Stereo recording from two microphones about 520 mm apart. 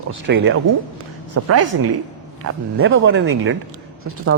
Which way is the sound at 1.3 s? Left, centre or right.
Right.